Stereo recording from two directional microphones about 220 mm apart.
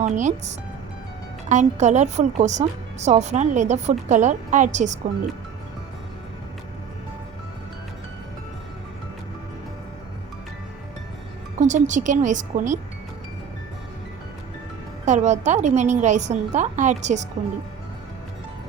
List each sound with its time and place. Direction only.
0.0 s a woman's voice: 30° right (ahead or behind)
11.6 s a woman's voice: 35° right (ahead or behind)
15.0 s a woman's voice: 30° right (ahead or behind)